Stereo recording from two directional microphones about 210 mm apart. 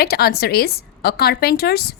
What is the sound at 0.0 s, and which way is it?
A woman's voice, 50° left (ahead or behind).